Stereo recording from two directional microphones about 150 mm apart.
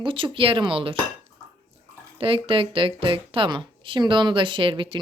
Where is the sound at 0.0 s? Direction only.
35° right (ahead or behind).